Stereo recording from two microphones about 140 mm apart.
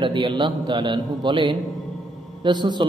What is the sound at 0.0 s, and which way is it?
A man's voice, 35° right (ahead or behind).